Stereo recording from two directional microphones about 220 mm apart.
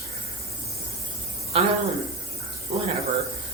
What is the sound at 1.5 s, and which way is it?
Speech, 25° right (ahead or behind).